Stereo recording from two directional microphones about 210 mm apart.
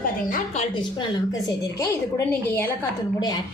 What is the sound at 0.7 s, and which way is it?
A woman's voice, 15° left (ahead or behind).